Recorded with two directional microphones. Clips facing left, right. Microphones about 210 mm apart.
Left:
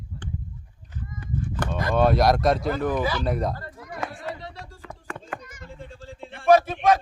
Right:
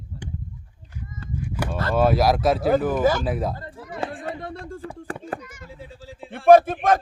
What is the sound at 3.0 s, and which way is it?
Speech, 45° right (ahead or behind).